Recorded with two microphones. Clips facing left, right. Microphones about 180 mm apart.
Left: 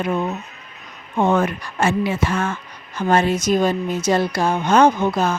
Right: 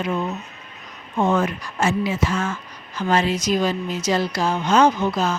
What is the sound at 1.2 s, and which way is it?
A woman's voice, 55° left (ahead or behind).